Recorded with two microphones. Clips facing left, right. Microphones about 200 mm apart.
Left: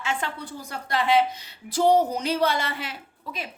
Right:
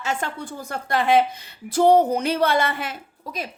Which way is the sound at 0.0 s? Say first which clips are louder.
Right 3 dB; 45° right (ahead or behind).